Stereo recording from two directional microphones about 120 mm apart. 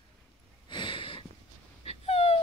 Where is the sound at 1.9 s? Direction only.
60° left (ahead or behind).